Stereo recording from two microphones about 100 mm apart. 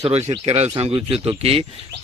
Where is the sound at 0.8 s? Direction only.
65° right (ahead or behind).